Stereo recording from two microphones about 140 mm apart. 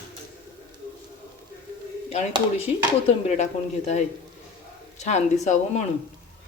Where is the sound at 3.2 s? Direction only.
55° left (ahead or behind).